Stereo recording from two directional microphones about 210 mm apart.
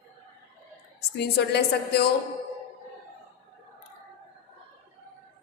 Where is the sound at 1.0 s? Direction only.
50° left (ahead or behind).